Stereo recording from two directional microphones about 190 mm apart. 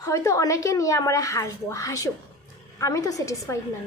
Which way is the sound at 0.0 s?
15° left (ahead or behind).